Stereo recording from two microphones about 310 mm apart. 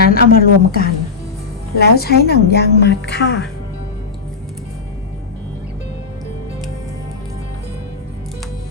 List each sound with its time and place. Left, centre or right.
0.1 s a woman's voice: left